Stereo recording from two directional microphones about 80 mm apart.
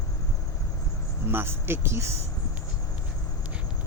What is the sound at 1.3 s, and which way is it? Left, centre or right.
Speech, right.